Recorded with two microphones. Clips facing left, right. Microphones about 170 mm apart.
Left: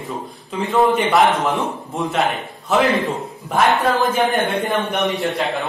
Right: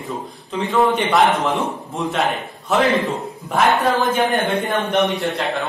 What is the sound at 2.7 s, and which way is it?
A man's voice, centre (ahead or behind).